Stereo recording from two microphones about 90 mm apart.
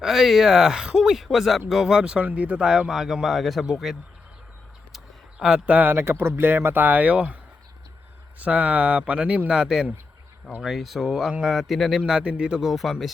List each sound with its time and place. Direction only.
0.0 s speech: 5° right (ahead or behind)
5.4 s speech: 10° right (ahead or behind)
8.4 s speech: 15° right (ahead or behind)